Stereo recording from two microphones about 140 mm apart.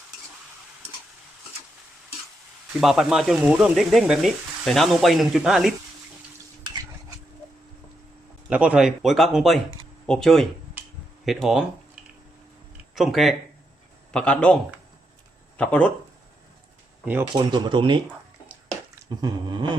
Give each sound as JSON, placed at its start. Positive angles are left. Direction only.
{"t": 2.8, "sound": "speech", "side_deg": 0}
{"t": 8.4, "sound": "a man's voice", "side_deg": -10}
{"t": 13.0, "sound": "speech", "side_deg": 0}
{"t": 17.3, "sound": "speech", "side_deg": -30}
{"t": 19.2, "sound": "speech", "side_deg": -30}